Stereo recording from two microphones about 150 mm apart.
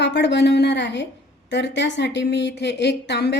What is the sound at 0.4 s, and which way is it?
Speech, 90° left.